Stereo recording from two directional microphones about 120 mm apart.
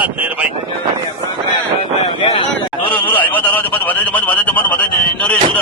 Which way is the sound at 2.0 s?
50° left (ahead or behind).